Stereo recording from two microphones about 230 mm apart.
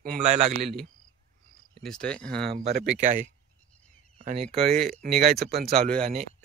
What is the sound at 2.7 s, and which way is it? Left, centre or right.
Speech, right.